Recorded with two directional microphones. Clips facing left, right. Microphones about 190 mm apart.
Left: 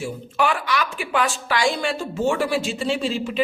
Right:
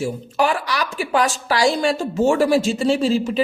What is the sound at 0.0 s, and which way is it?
A woman's voice, 40° right (ahead or behind).